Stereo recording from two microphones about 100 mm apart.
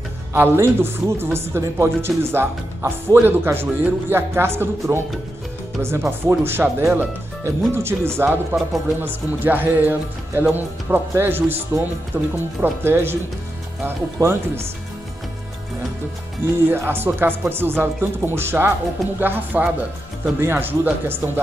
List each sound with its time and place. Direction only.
0.3 s speech: 25° right (ahead or behind)
16.4 s speech: 25° right (ahead or behind)